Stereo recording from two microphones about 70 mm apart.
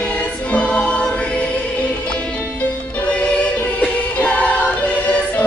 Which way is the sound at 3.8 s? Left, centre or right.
Centre.